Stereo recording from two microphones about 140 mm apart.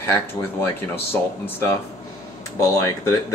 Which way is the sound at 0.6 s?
15° left (ahead or behind).